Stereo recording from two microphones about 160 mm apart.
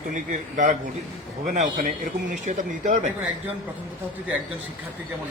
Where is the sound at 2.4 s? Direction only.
50° right (ahead or behind).